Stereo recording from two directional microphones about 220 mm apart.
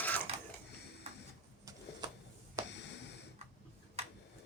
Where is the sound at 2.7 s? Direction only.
50° left (ahead or behind).